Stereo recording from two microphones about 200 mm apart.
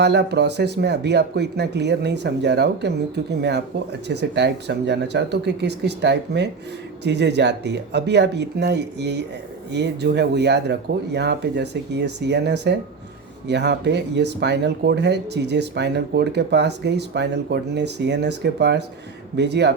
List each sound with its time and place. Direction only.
0.0 s speech: 55° right (ahead or behind)
4.1 s speech: 60° right (ahead or behind)